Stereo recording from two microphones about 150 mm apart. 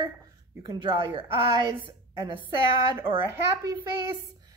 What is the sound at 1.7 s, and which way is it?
Speech, 20° right (ahead or behind).